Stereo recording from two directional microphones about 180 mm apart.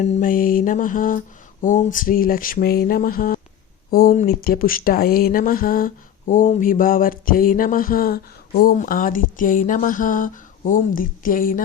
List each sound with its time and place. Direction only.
0.0 s speech: 50° left (ahead or behind)